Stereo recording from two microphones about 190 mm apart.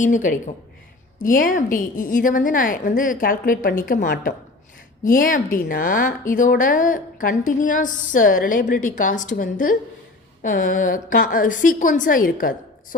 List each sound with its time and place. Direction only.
0.0 s a woman's voice: 40° left (ahead or behind)